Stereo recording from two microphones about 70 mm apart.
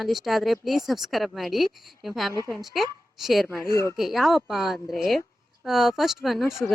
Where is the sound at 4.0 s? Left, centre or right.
Centre.